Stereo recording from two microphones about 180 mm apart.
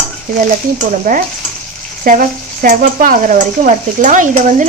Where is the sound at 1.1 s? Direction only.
50° right (ahead or behind).